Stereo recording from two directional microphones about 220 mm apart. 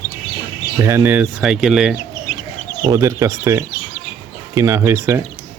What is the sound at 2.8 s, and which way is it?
Speech, 15° right (ahead or behind).